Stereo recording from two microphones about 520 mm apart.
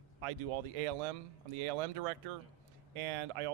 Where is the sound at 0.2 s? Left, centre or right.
Right.